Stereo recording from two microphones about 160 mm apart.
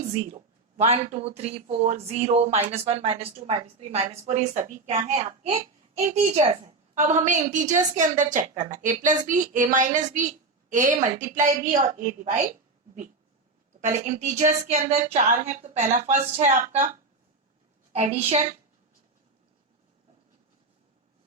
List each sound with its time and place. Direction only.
0.8 s a woman's voice: 40° right (ahead or behind)
13.8 s a woman's voice: 50° right (ahead or behind)